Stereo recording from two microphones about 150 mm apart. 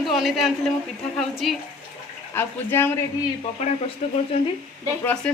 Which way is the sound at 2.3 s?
15° left (ahead or behind).